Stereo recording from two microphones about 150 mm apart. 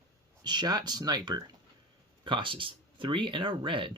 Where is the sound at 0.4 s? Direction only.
30° right (ahead or behind).